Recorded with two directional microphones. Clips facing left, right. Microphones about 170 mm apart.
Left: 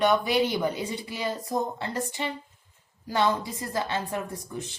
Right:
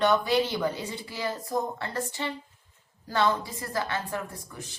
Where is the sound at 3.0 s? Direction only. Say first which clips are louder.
Left 1 dB; 15° left (ahead or behind).